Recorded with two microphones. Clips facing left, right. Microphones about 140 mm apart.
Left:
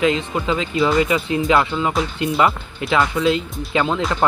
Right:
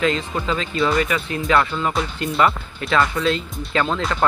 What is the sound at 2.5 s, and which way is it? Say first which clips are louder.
Speech: left 1 dB; centre (ahead or behind).